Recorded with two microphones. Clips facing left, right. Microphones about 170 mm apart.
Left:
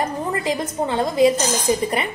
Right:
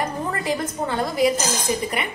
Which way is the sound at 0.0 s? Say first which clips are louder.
Left 3 dB; 20° left (ahead or behind).